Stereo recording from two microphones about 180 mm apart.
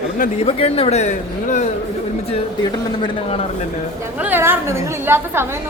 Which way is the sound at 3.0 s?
35° left (ahead or behind).